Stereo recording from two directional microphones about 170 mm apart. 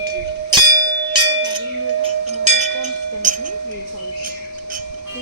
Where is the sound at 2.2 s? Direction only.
40° right (ahead or behind).